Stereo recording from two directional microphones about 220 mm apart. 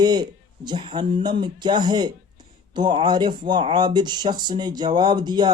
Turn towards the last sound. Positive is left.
turn(degrees=-20)  # may be behind; listen again after turning